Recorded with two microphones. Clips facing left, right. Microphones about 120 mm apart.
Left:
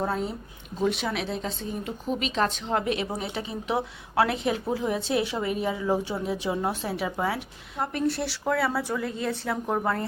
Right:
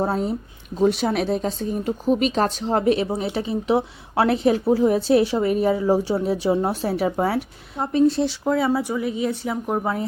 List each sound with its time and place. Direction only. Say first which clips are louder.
0.0 s speech: right 6 dB; 40° right (ahead or behind)
7.8 s speech: right 8 dB; 20° right (ahead or behind)